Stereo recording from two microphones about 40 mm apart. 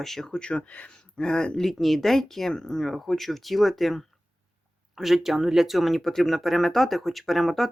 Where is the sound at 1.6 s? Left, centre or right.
Centre.